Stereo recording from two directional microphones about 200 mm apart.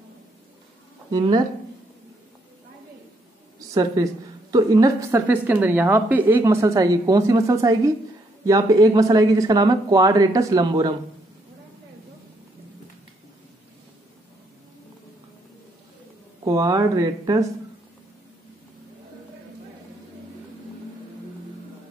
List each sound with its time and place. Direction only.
1.1 s speech: 20° right (ahead or behind)
3.7 s a woman's voice: 15° right (ahead or behind)
16.4 s a woman's voice: 15° right (ahead or behind)